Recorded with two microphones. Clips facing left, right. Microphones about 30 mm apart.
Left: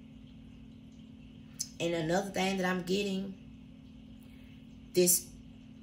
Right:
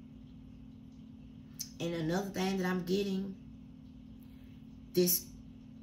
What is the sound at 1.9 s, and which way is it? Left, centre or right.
A woman's voice, left.